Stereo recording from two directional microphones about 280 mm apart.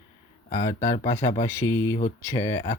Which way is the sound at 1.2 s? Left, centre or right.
Centre.